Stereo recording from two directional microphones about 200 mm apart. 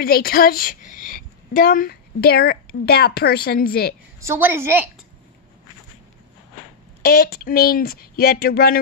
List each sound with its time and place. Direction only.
0.0 s a woman's voice: 50° left (ahead or behind)
4.2 s a woman's voice: 10° right (ahead or behind)
7.0 s a woman's voice: 50° left (ahead or behind)